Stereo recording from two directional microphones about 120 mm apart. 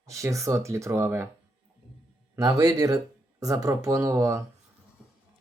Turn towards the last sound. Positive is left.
turn(degrees=-25)  # may be behind; listen again after turning